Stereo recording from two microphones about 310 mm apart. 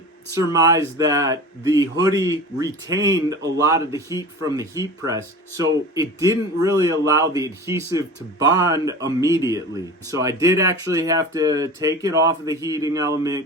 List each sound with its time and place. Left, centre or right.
0.5 s speech: centre